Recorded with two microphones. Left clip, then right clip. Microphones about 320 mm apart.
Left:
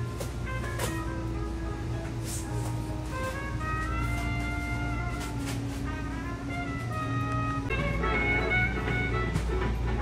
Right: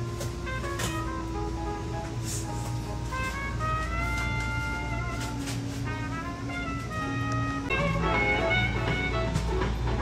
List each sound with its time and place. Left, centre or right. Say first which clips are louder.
7.7 s music: right 4 dB; centre